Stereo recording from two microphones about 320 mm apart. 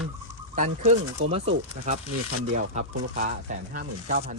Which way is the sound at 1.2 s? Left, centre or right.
Right.